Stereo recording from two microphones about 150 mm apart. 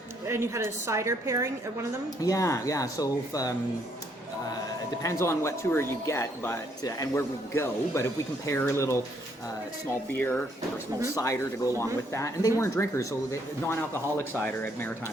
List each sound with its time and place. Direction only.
0.3 s a woman's voice: 20° right (ahead or behind)
2.2 s speech: 20° left (ahead or behind)
5.0 s speech: 20° left (ahead or behind)
10.1 s speech: 10° left (ahead or behind)